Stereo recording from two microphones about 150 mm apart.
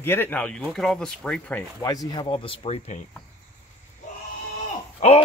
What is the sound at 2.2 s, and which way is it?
Speech, 40° left (ahead or behind).